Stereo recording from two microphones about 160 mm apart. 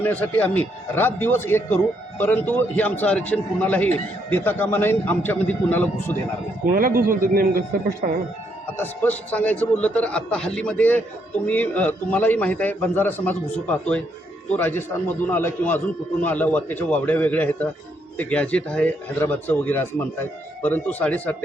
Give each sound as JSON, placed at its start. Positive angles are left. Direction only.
{"t": 0.0, "sound": "a man's voice", "side_deg": 10}
{"t": 6.7, "sound": "a man's voice", "side_deg": -60}
{"t": 8.8, "sound": "a man's voice", "side_deg": 10}